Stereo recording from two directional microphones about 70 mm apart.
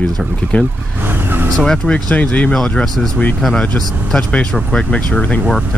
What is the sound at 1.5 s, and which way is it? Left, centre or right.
Speech, centre.